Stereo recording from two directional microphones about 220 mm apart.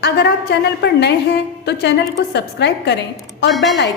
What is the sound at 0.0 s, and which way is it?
A woman's voice, 50° left (ahead or behind).